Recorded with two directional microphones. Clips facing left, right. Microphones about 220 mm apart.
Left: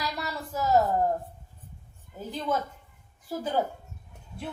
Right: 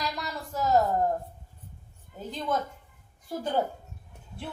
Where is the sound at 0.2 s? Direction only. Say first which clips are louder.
Even; 5° left (ahead or behind).